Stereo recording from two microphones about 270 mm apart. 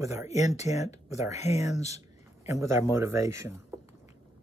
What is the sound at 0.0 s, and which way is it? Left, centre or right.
Speech, centre.